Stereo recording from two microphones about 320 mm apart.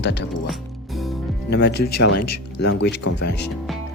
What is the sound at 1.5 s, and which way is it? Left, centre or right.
Speech, left.